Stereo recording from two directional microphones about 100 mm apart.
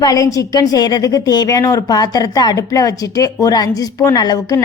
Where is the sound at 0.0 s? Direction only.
35° left (ahead or behind).